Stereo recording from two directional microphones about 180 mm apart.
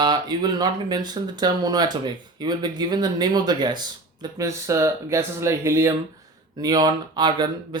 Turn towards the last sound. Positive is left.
turn(degrees=-25)  # may be behind; listen again after turning